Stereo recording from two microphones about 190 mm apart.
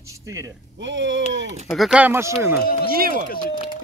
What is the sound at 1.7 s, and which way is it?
Speech, centre (ahead or behind).